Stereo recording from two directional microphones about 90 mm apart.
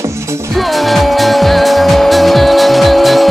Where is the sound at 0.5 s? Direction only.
Centre (ahead or behind).